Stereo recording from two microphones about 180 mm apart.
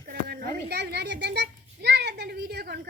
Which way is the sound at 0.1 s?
65° right (ahead or behind).